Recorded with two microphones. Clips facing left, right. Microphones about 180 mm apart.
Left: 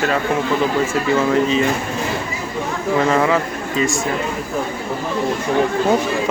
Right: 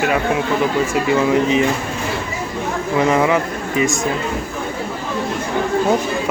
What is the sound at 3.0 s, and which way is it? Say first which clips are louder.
Speech: right 1 dB; 15° right (ahead or behind).